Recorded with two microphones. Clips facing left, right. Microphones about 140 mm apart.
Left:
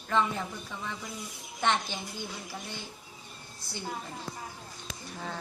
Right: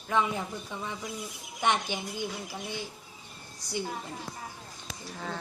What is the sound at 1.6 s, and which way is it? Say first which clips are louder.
Speech: right 1 dB; 15° right (ahead or behind).